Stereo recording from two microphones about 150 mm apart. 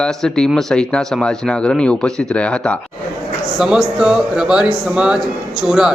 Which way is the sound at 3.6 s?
5° right (ahead or behind).